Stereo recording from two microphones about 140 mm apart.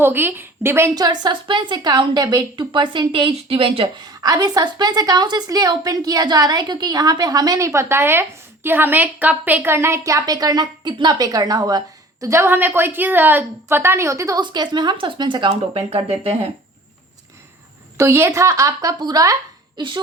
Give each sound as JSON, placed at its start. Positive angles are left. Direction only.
{"t": 0.0, "sound": "a woman's voice", "side_deg": -15}
{"t": 17.9, "sound": "speech", "side_deg": -20}